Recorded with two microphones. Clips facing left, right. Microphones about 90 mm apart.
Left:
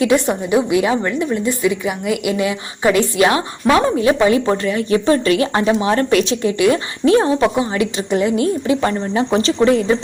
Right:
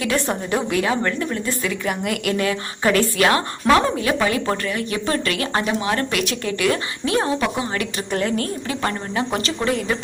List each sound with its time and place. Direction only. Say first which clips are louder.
0.0 s a woman's voice: left 7 dB; 15° left (ahead or behind)